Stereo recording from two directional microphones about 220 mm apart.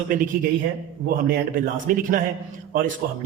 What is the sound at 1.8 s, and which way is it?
Speech, 40° right (ahead or behind).